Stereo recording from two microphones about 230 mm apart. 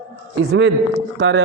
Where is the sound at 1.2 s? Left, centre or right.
Right.